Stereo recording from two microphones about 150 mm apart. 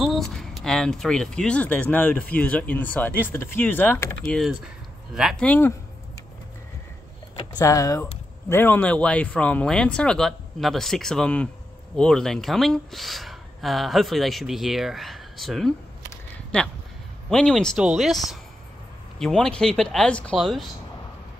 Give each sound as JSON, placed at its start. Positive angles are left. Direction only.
{"t": 0.0, "sound": "speech", "side_deg": 0}
{"t": 4.2, "sound": "speech", "side_deg": 5}
{"t": 7.3, "sound": "speech", "side_deg": 25}